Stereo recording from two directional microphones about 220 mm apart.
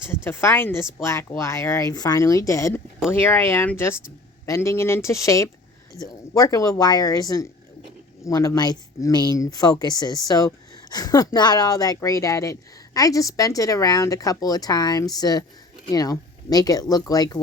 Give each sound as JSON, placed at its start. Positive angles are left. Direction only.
{"t": 0.3, "sound": "a woman's voice", "side_deg": 10}